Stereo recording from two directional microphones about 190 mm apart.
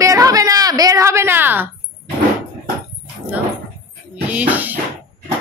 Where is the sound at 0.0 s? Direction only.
20° right (ahead or behind).